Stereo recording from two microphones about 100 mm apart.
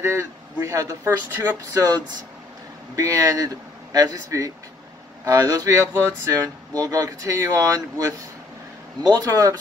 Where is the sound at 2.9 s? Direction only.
35° right (ahead or behind).